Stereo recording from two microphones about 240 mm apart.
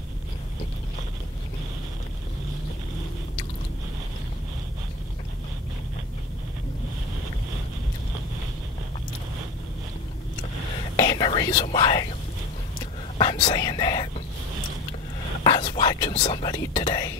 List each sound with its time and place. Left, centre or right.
11.0 s speech: centre
13.2 s speech: centre
15.4 s speech: left